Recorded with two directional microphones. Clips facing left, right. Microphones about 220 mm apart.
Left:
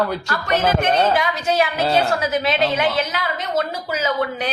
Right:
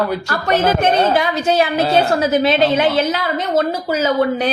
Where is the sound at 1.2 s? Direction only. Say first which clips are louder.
Right 4 dB; 25° right (ahead or behind).